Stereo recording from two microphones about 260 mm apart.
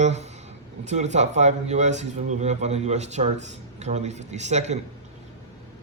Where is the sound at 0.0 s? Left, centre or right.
Right.